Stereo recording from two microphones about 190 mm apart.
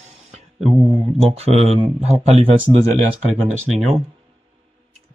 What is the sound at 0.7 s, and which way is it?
Speech, 30° right (ahead or behind).